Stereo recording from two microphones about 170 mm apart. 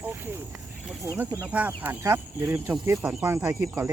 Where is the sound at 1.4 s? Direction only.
10° right (ahead or behind).